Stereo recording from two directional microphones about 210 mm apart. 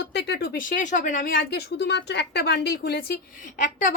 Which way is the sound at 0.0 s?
50° left (ahead or behind).